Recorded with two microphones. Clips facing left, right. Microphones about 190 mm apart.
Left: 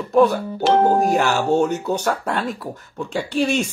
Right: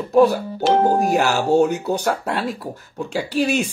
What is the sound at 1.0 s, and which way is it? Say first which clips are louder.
Speech: even; 10° right (ahead or behind).